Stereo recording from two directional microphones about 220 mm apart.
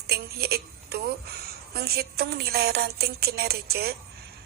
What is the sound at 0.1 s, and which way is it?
A woman's voice, 45° right (ahead or behind).